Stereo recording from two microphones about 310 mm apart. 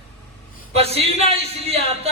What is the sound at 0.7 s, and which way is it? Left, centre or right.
A man's voice, centre.